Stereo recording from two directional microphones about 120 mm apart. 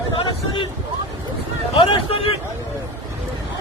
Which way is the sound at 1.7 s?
50° left (ahead or behind).